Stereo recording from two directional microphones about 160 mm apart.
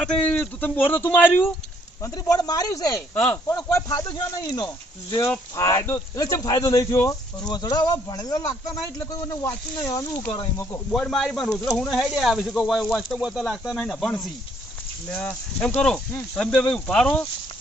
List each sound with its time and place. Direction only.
0.0 s speech: 10° left (ahead or behind)
10.9 s speech: centre (ahead or behind)